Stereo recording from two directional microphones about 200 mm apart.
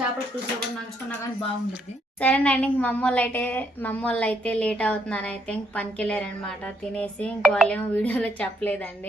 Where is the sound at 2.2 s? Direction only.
10° left (ahead or behind).